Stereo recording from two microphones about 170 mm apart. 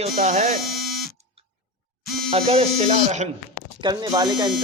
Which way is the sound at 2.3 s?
35° right (ahead or behind).